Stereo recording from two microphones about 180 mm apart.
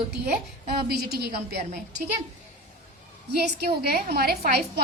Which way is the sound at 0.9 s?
60° right (ahead or behind).